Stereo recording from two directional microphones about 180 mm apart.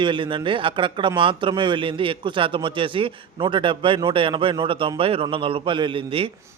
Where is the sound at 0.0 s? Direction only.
25° right (ahead or behind).